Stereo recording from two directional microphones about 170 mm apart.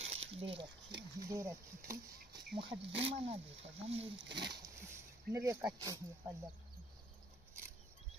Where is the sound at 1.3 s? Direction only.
15° right (ahead or behind).